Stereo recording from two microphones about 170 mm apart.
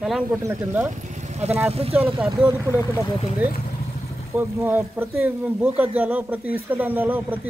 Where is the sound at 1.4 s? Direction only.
40° right (ahead or behind).